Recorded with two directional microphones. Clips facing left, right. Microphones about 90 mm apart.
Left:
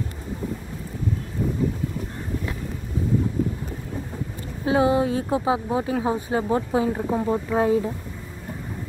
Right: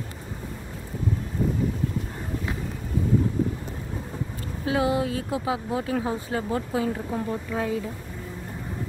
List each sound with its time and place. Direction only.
4.6 s speech: 30° left (ahead or behind)